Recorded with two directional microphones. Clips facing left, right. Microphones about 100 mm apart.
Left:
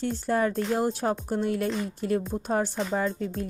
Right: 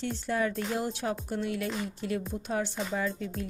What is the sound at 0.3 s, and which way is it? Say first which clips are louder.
Speech: left 5 dB; 40° left (ahead or behind).